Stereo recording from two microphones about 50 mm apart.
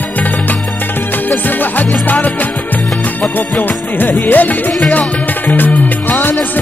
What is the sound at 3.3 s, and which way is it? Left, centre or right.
Music, left.